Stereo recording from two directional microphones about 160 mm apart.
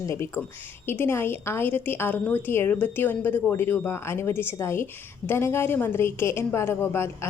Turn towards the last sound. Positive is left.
turn(degrees=15)  # may be behind; listen again after turning